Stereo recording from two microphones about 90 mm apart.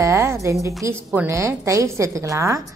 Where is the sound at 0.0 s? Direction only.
30° right (ahead or behind).